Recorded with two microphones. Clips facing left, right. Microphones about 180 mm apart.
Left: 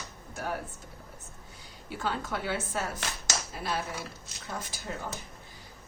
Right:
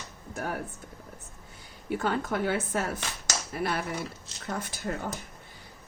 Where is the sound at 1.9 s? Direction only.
55° right (ahead or behind).